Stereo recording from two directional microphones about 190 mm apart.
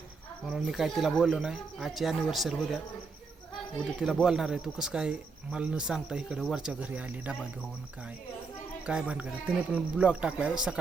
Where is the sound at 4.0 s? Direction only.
Centre (ahead or behind).